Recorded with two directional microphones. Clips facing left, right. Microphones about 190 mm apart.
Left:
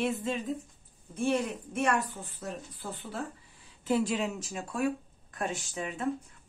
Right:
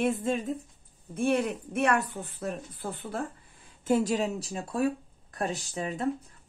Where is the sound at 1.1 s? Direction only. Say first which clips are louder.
Right 3 dB; 60° right (ahead or behind).